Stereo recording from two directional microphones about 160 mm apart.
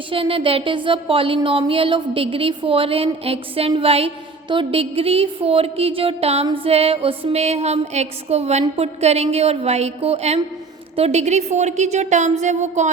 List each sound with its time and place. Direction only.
0.1 s a woman's voice: 35° right (ahead or behind)